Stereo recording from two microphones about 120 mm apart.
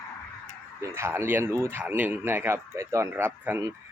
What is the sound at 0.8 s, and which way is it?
Speech, 20° right (ahead or behind).